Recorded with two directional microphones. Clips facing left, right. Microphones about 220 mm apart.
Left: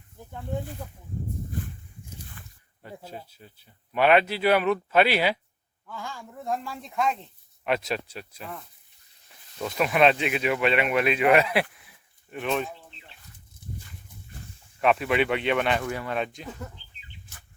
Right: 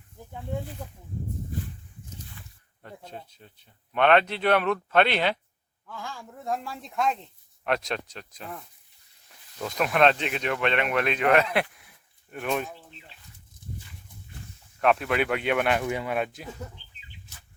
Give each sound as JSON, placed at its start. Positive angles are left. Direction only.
{"t": 2.4, "sound": "a sound", "side_deg": 50}
{"t": 2.8, "sound": "speech", "side_deg": 5}
{"t": 9.6, "sound": "speech", "side_deg": 5}
{"t": 14.8, "sound": "speech", "side_deg": 0}
{"t": 15.9, "sound": "speech", "side_deg": -15}
{"t": 16.1, "sound": "speech", "side_deg": -5}